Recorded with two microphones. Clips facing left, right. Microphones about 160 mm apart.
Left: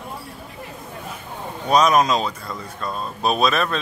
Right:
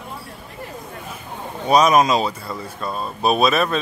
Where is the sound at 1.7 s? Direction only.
5° right (ahead or behind).